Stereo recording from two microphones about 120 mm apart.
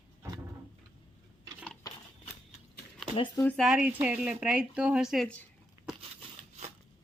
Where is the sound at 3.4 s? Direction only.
Centre (ahead or behind).